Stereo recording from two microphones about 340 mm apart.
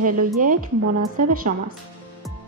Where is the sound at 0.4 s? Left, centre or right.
Right.